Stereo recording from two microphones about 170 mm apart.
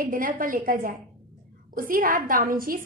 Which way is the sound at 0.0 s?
55° right (ahead or behind).